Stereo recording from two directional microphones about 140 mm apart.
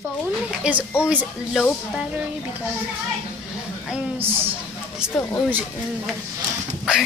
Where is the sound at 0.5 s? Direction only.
10° right (ahead or behind).